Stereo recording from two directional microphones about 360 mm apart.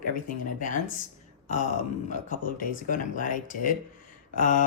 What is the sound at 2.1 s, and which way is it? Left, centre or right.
Speech, left.